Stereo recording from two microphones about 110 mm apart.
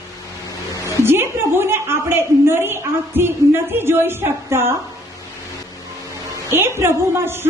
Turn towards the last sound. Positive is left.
turn(degrees=-20)  # may be behind; listen again after turning